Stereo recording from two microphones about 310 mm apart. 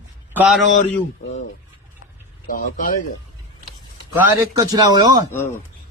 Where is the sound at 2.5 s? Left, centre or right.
Left.